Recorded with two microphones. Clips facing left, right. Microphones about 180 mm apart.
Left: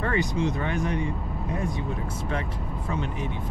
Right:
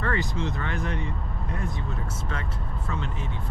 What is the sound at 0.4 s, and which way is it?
Speech, 15° left (ahead or behind).